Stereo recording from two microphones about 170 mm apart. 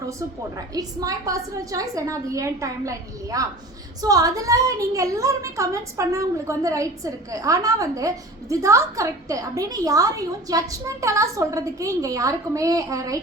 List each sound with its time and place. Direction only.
0.7 s a woman's voice: 20° right (ahead or behind)